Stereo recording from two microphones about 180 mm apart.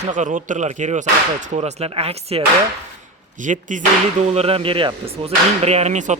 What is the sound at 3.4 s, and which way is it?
Speech, 45° right (ahead or behind).